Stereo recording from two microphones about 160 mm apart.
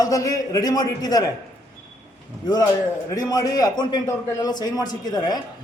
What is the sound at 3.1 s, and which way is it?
A man's voice, 20° left (ahead or behind).